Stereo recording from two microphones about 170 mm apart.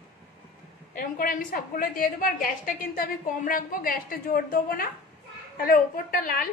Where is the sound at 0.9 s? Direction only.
55° left (ahead or behind).